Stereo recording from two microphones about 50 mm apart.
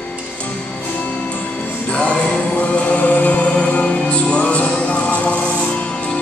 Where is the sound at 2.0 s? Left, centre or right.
Left.